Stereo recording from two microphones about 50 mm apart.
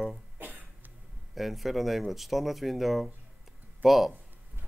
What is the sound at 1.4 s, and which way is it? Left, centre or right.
Speech, centre.